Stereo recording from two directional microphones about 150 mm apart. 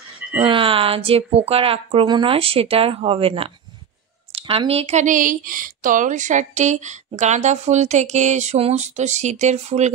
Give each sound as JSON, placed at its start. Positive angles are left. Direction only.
{"t": 0.4, "sound": "speech", "side_deg": -35}